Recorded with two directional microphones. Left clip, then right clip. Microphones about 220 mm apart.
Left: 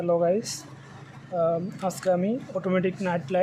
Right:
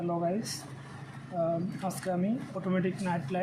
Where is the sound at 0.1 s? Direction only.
40° left (ahead or behind).